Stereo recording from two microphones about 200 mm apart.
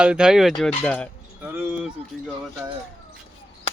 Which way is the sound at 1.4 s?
10° right (ahead or behind).